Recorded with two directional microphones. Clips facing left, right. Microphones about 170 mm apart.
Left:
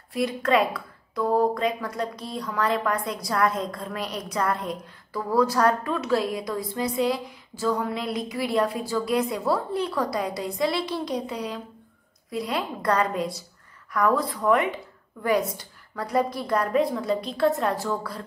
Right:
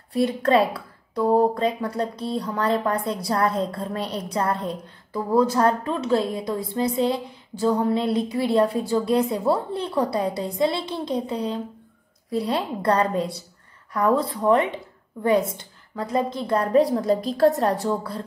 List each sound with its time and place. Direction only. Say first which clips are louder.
0.1 s a woman's voice: right 3 dB; 30° right (ahead or behind)
17.8 s speech: right 4 dB; 30° right (ahead or behind)